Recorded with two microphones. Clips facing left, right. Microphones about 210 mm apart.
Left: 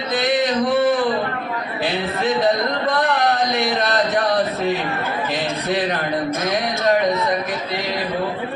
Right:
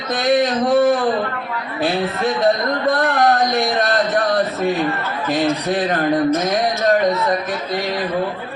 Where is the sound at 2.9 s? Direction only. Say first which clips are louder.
Right 3 dB; 50° right (ahead or behind).